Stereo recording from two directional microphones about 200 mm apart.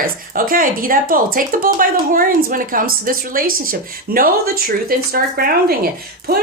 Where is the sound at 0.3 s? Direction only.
45° right (ahead or behind).